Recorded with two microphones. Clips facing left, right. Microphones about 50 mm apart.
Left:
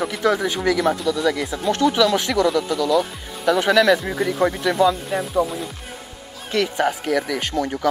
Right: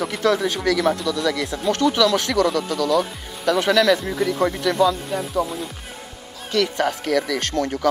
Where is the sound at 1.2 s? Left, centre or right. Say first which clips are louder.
Left 1 dB; left.